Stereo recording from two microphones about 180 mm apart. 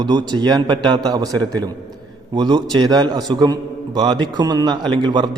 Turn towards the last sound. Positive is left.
turn(degrees=-25)  # may be behind; listen again after turning